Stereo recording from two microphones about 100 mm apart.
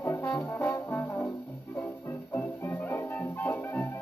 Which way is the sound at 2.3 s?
15° left (ahead or behind).